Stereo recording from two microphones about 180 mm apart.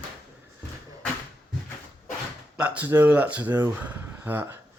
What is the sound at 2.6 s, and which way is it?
Speech, 10° right (ahead or behind).